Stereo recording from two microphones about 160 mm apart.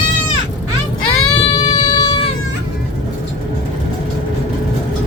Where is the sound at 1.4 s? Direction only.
25° left (ahead or behind).